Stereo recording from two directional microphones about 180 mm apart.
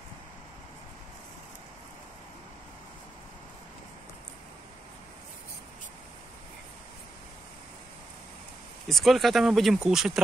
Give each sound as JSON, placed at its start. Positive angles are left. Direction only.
{"t": 8.8, "sound": "speech", "side_deg": 0}